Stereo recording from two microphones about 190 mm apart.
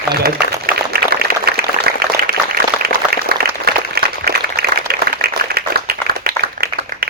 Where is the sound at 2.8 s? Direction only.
55° right (ahead or behind).